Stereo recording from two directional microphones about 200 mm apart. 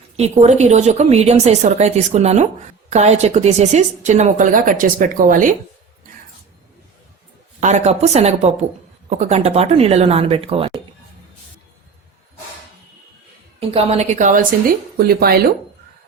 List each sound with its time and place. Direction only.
0.2 s speech: 35° right (ahead or behind)
7.6 s speech: 35° right (ahead or behind)
13.6 s speech: 30° right (ahead or behind)
14.9 s speech: 50° right (ahead or behind)